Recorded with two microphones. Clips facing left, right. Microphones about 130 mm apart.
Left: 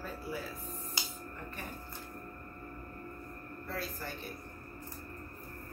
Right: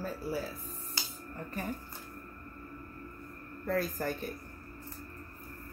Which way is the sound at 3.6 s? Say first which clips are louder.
Right 9 dB; 45° right (ahead or behind).